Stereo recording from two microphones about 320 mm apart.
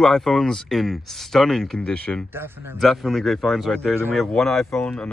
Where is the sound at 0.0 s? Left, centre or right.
Centre.